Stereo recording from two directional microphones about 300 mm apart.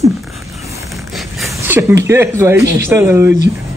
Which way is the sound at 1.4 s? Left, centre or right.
Centre.